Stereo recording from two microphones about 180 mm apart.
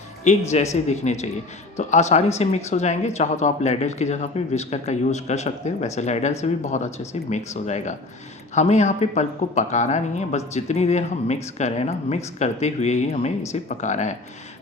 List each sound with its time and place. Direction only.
0.3 s speech: 40° left (ahead or behind)